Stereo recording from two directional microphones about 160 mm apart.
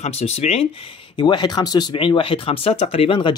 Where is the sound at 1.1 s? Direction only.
30° left (ahead or behind).